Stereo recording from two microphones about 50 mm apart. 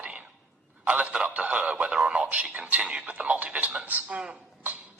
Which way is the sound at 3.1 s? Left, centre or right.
Right.